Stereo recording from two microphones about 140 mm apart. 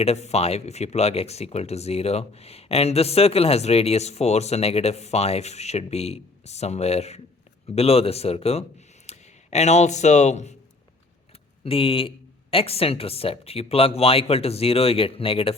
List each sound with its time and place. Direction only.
0.0 s speech: 50° left (ahead or behind)
11.6 s speech: 40° left (ahead or behind)